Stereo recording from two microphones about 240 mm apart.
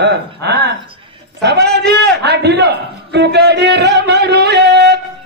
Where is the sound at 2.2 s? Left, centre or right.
Right.